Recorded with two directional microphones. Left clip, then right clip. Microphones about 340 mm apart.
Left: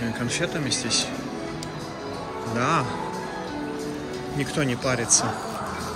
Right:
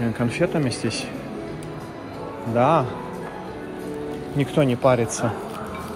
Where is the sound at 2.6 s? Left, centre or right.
Centre.